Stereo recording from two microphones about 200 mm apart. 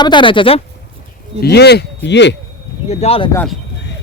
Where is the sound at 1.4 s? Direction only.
55° left (ahead or behind).